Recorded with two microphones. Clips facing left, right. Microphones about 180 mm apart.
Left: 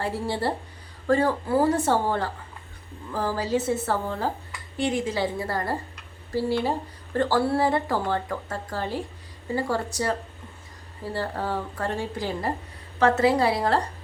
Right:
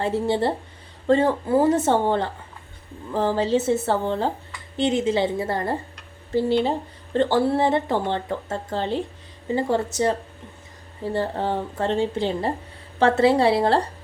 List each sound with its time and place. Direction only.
0.0 s speech: 20° right (ahead or behind)